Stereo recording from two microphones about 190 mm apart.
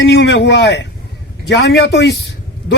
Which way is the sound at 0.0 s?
70° left (ahead or behind).